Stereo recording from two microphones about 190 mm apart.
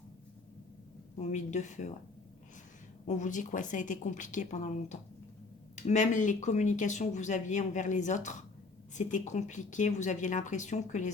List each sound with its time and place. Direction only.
1.2 s speech: 40° left (ahead or behind)
3.1 s speech: 40° left (ahead or behind)